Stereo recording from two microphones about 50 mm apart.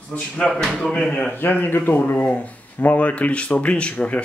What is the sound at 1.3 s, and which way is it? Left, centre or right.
Speech, left.